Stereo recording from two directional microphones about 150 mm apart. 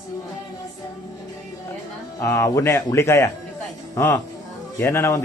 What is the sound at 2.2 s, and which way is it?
Speech, 20° left (ahead or behind).